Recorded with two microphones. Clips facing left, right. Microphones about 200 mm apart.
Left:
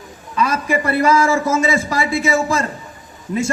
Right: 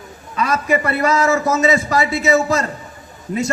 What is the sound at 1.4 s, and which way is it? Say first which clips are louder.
Speech: even; 50° left (ahead or behind).